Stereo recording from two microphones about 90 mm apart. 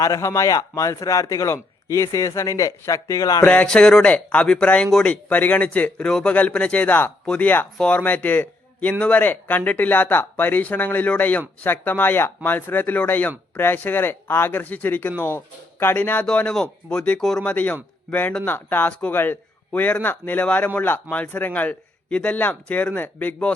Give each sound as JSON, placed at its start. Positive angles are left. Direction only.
{"t": 0.0, "sound": "a man's voice", "side_deg": 35}
{"t": 3.4, "sound": "a man's voice", "side_deg": 15}
{"t": 17.4, "sound": "a man's voice", "side_deg": 15}